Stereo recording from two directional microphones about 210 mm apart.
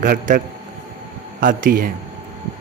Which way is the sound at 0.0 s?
40° right (ahead or behind).